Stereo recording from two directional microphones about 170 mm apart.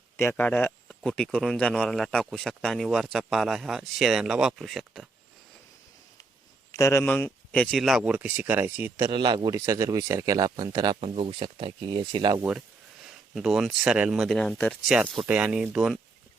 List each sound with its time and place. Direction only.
0.2 s speech: 10° left (ahead or behind)
6.7 s a man's voice: 15° left (ahead or behind); by 12.4 s 25° right (ahead or behind)
12.4 s a man's voice: 5° right (ahead or behind)